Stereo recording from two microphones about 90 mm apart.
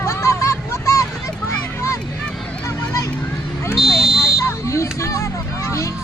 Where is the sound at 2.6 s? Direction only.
30° left (ahead or behind).